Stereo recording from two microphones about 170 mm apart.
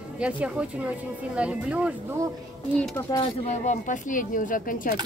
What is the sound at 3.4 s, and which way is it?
Speech, 45° left (ahead or behind).